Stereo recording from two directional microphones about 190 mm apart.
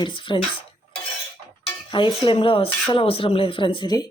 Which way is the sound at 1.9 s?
25° left (ahead or behind).